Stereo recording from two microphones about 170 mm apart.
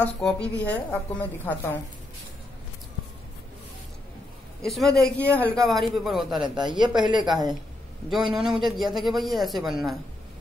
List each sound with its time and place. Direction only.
0.0 s a woman's voice: 5° left (ahead or behind)
4.6 s a man's voice: centre (ahead or behind)
6.8 s speech: 25° right (ahead or behind)
8.1 s a man's voice: 5° right (ahead or behind)